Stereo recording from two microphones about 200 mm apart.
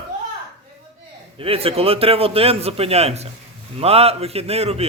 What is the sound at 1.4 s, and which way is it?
A man's voice, 30° right (ahead or behind).